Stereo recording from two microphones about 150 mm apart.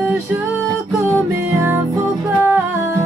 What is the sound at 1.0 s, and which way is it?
Music, 20° right (ahead or behind).